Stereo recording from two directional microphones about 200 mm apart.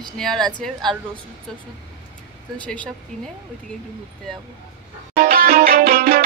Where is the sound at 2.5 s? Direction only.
5° left (ahead or behind).